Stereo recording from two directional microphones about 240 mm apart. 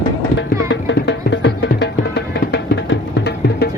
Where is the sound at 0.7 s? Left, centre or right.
Left.